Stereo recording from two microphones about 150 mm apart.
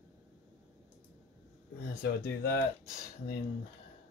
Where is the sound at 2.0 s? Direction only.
90° left.